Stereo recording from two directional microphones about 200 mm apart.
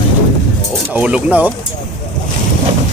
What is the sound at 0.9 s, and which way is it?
Speech, 5° right (ahead or behind).